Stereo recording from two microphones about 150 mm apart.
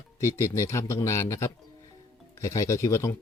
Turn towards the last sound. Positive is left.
turn(degrees=20)  # may be behind; listen again after turning